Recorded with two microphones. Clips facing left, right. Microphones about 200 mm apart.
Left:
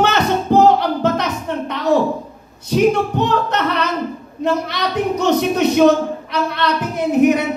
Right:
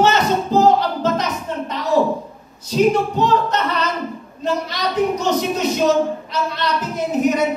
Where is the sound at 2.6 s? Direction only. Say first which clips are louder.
Left 1 dB; 60° left (ahead or behind).